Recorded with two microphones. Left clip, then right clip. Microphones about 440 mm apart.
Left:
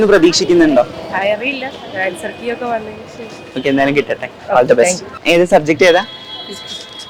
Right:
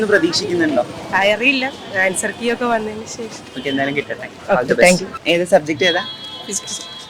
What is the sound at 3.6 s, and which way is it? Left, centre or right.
Speech, left.